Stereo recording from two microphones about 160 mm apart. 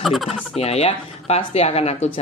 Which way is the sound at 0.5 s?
40° left (ahead or behind).